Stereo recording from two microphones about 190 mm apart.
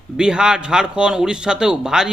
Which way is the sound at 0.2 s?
5° right (ahead or behind).